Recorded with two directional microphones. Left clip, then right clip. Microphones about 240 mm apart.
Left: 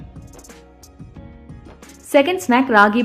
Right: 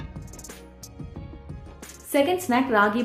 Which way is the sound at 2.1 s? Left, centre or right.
Left.